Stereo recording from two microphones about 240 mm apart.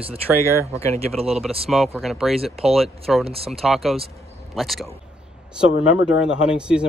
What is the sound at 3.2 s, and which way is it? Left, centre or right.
Speech, right.